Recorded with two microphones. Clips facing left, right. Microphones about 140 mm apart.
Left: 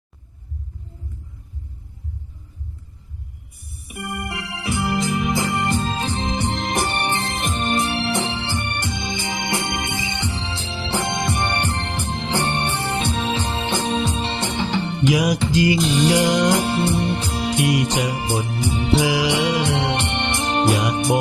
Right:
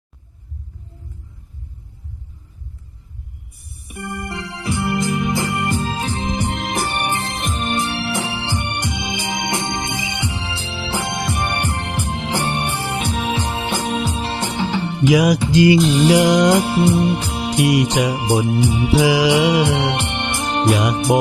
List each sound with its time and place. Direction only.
3.7 s organ: centre (ahead or behind)
6.5 s music: centre (ahead or behind)
8.4 s music: 15° right (ahead or behind)
15.1 s music: 90° right
15.8 s music: centre (ahead or behind)
16.1 s music: 80° right
16.6 s music: 5° right (ahead or behind)
18.6 s music: 10° right (ahead or behind)
19.0 s music: 90° right
19.7 s music: 5° right (ahead or behind)